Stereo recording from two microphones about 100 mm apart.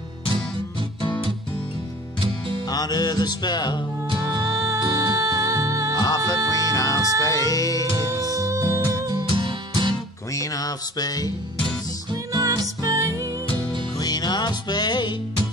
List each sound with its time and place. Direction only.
2.7 s music: 40° left (ahead or behind)
4.4 s music: 35° right (ahead or behind)
5.9 s music: 40° left (ahead or behind)
8.1 s music: 35° right (ahead or behind)
9.3 s music: 55° right (ahead or behind)
10.3 s music: 35° left (ahead or behind)
12.1 s music: 40° right (ahead or behind)
13.9 s music: 45° left (ahead or behind)